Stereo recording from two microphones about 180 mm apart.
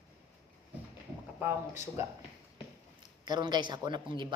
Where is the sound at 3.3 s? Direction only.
25° right (ahead or behind).